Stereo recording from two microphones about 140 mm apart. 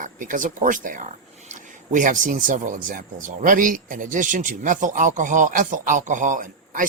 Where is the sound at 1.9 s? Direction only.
65° right (ahead or behind).